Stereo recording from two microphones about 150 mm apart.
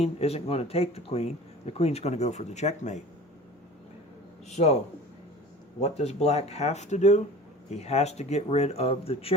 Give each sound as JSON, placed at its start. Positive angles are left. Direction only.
{"t": 0.0, "sound": "speech", "side_deg": 45}
{"t": 4.4, "sound": "speech", "side_deg": 45}
{"t": 5.8, "sound": "speech", "side_deg": 45}